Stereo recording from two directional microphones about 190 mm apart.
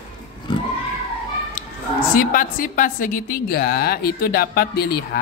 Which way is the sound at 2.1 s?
45° left (ahead or behind).